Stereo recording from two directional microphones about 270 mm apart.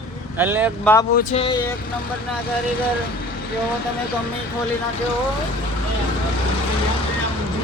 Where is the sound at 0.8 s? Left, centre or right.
Centre.